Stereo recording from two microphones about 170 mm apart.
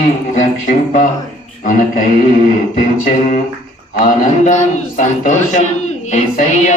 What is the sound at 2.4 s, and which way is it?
Plucked string instrument, 55° left (ahead or behind).